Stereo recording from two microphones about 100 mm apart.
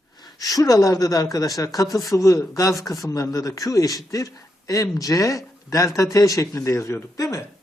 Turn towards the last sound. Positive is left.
turn(degrees=35)  # may be behind; listen again after turning